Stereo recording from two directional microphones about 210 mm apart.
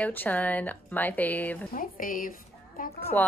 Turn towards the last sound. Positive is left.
turn(degrees=5)  # may be behind; listen again after turning